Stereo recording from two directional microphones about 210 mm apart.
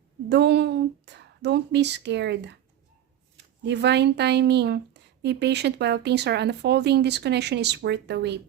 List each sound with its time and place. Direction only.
0.3 s speech: 55° right (ahead or behind)
3.6 s speech: 55° right (ahead or behind)